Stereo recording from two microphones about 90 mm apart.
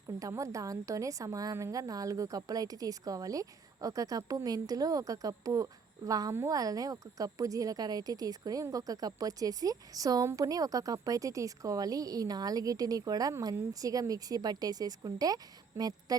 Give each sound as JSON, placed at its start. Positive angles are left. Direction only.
{"t": 0.2, "sound": "a woman's voice", "side_deg": -35}